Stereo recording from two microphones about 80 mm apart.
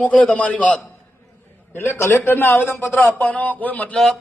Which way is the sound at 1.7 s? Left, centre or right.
Left.